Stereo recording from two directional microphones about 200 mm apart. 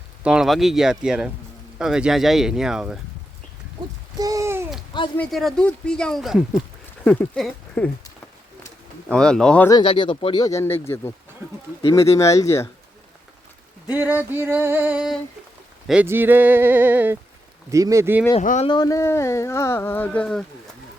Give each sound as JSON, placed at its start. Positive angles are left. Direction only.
{"t": 0.2, "sound": "speech", "side_deg": -5}
{"t": 4.2, "sound": "babbling", "side_deg": -15}
{"t": 5.1, "sound": "speech", "side_deg": 5}
{"t": 9.0, "sound": "speech", "side_deg": 5}
{"t": 9.6, "sound": "speech", "side_deg": 25}
{"t": 13.9, "sound": "speech", "side_deg": -10}
{"t": 18.3, "sound": "speech", "side_deg": 35}
{"t": 18.7, "sound": "speech", "side_deg": 20}